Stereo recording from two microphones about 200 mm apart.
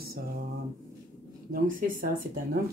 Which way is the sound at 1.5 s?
45° right (ahead or behind).